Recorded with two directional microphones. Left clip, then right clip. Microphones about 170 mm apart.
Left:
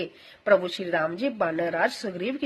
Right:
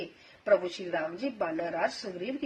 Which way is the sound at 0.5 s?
40° left (ahead or behind).